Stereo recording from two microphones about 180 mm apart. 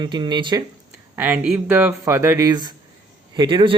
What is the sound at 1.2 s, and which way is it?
Speech, 10° right (ahead or behind).